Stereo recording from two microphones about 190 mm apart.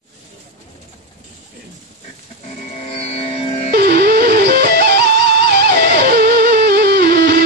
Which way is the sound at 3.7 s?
55° right (ahead or behind).